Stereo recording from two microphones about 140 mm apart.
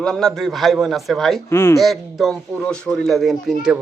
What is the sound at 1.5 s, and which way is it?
Speech, 20° left (ahead or behind).